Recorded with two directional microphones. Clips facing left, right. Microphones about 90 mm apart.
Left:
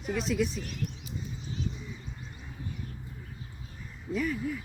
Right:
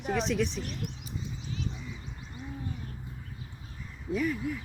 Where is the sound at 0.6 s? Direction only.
35° right (ahead or behind).